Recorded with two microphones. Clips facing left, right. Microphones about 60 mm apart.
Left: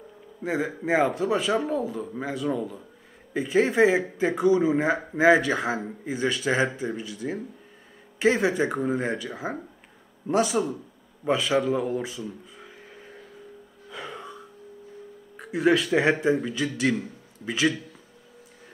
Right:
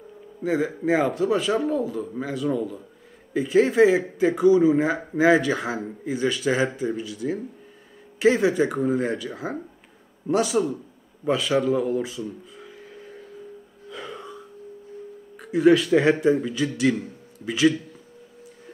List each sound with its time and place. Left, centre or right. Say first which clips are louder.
0.5 s a man's voice: right 3 dB; centre
7.0 s speech: right 4 dB; centre
8.3 s a man's voice: right 3 dB; centre
12.7 s vehicle: right 4 dB; centre
13.8 s gasp: right 1 dB; centre
15.3 s speech: right 4 dB; centre